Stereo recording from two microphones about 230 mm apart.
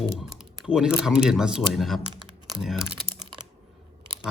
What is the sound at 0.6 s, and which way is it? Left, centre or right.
Speech, centre.